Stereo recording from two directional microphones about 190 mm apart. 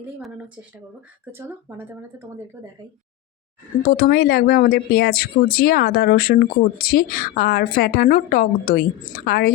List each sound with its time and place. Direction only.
1.3 s speech: 10° right (ahead or behind)
3.8 s speech: 50° left (ahead or behind)